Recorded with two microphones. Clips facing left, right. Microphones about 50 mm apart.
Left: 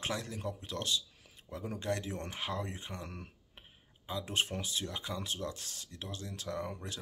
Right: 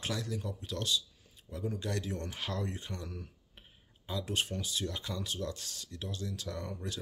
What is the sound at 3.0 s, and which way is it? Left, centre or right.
Speech, left.